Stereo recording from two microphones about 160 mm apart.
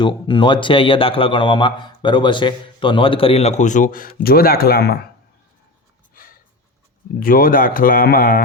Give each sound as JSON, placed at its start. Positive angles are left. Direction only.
{"t": 0.0, "sound": "a man's voice", "side_deg": 30}
{"t": 7.2, "sound": "speech", "side_deg": 65}